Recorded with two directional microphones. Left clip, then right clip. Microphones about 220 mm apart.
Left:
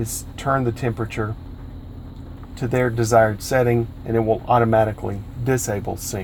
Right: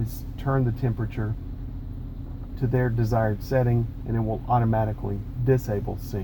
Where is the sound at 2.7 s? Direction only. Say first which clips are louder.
Left 10 dB; 40° left (ahead or behind).